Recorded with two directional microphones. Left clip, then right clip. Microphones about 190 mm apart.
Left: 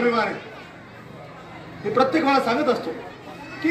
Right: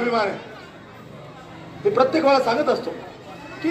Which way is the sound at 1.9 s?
40° left (ahead or behind).